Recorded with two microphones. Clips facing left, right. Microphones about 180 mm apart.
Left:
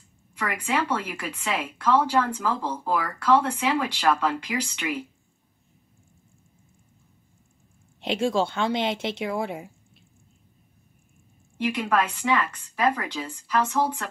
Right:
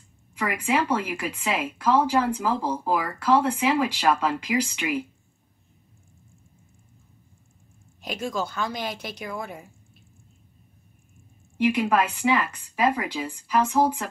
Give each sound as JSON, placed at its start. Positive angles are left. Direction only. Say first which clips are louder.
{"t": 0.4, "sound": "speech", "louder": "right 2 dB", "side_deg": -10}
{"t": 8.0, "sound": "speech", "louder": "left 6 dB", "side_deg": 25}
{"t": 11.5, "sound": "speech", "louder": "right 3 dB", "side_deg": -10}